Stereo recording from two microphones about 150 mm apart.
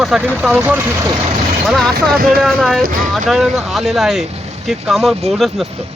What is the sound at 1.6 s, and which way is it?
Speech, centre (ahead or behind).